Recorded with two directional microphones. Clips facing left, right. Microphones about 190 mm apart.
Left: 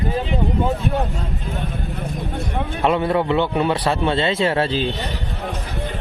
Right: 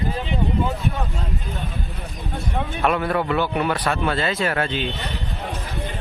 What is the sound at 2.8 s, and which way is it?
A man's voice, 25° left (ahead or behind).